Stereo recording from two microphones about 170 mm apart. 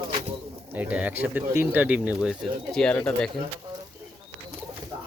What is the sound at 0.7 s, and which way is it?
Speech, 10° right (ahead or behind).